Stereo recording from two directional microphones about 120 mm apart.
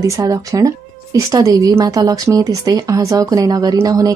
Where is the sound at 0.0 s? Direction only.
25° right (ahead or behind).